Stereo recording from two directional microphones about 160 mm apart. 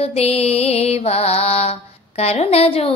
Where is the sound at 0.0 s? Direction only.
40° left (ahead or behind).